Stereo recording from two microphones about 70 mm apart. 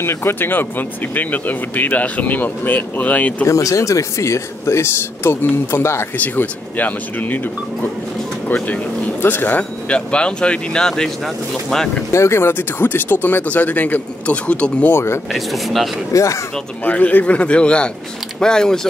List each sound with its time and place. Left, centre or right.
0.0 s speech: left
3.4 s speech: left
6.1 s speech: left
9.2 s speech: left; by 11.1 s centre
12.1 s speech: left; by 14.9 s centre
14.9 s speech: left
15.3 s speech: centre
16.1 s speech: left
16.8 s speech: left